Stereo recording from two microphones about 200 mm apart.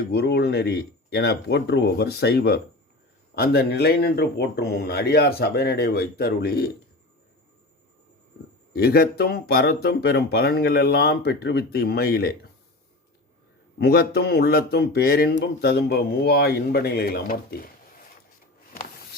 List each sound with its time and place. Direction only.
0.1 s speech: 55° left (ahead or behind)
8.7 s speech: 50° left (ahead or behind)
13.7 s speech: 50° left (ahead or behind)